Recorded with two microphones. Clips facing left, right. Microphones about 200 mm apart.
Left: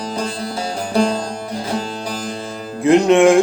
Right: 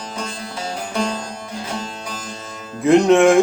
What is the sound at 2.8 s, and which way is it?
Music, centre (ahead or behind).